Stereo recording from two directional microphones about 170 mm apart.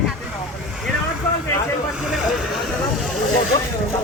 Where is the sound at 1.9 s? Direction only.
5° right (ahead or behind).